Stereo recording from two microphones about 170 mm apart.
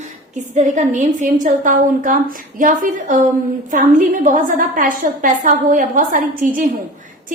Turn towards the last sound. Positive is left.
turn(degrees=-55)  # may be behind; listen again after turning